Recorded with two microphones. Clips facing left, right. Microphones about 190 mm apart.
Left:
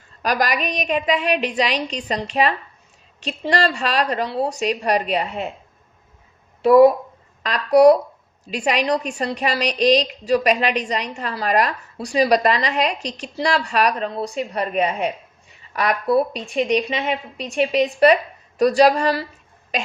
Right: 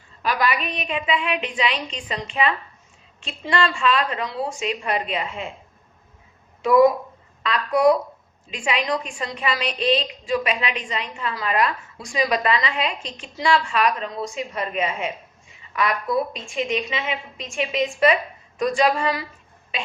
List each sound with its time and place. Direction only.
0.2 s a woman's voice: 40° left (ahead or behind)
6.7 s a woman's voice: 35° left (ahead or behind)